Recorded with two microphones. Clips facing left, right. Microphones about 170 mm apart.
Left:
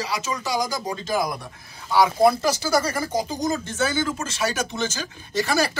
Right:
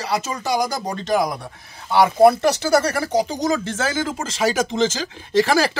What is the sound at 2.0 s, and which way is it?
Speech, 60° right (ahead or behind).